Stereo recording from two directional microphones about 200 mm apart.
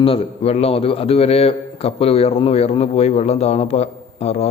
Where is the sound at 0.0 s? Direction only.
30° left (ahead or behind).